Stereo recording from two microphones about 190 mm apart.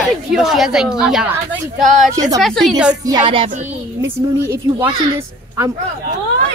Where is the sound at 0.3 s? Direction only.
Centre (ahead or behind).